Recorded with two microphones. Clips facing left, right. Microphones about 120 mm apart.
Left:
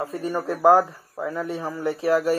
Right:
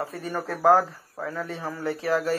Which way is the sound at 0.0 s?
15° left (ahead or behind).